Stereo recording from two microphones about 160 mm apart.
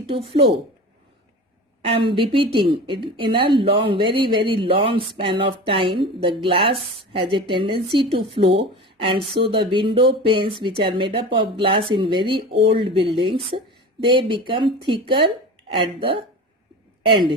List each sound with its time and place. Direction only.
0.1 s a woman's voice: 35° right (ahead or behind)
1.8 s a woman's voice: 30° right (ahead or behind)